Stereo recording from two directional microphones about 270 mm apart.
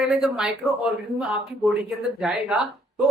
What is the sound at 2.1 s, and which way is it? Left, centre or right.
Speech, centre.